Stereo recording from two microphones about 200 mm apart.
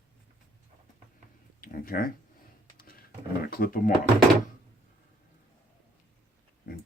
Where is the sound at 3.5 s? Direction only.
45° left (ahead or behind).